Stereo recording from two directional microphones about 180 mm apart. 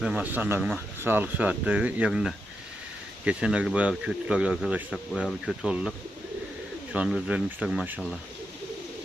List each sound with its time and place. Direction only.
0.0 s a man's voice: 5° right (ahead or behind)
6.9 s a man's voice: 5° right (ahead or behind)